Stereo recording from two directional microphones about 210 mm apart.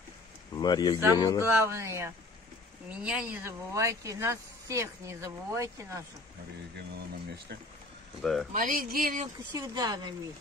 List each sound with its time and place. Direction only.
0.6 s speech: 20° left (ahead or behind)
1.4 s speech: 10° right (ahead or behind)
8.2 s speech: centre (ahead or behind)
8.5 s speech: 40° right (ahead or behind)
9.5 s a woman's voice: 20° right (ahead or behind)